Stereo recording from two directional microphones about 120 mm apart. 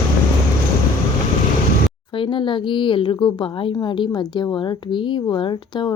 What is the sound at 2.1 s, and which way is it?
A woman's voice, 45° left (ahead or behind).